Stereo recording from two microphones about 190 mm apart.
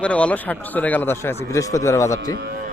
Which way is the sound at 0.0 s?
5° left (ahead or behind).